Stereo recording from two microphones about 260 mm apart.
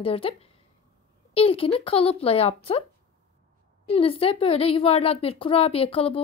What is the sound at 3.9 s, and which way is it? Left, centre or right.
A woman's voice, left.